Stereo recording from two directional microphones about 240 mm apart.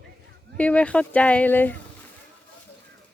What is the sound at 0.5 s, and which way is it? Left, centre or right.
Speech, centre.